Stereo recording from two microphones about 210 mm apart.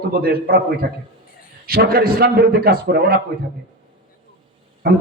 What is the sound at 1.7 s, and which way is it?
A man's voice, 45° right (ahead or behind).